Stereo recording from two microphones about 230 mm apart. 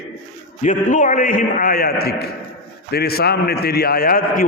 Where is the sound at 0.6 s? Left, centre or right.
Left.